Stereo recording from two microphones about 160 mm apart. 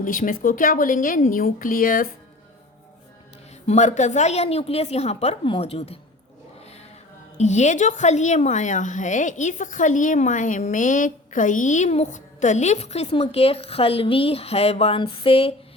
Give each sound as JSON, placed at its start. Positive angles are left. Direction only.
{"t": 0.0, "sound": "a woman's voice", "side_deg": 60}
{"t": 3.7, "sound": "a woman's voice", "side_deg": 50}
{"t": 7.3, "sound": "a woman's voice", "side_deg": 45}